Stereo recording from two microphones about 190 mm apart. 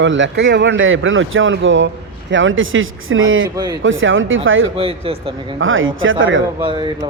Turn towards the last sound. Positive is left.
turn(degrees=-25)  # may be behind; listen again after turning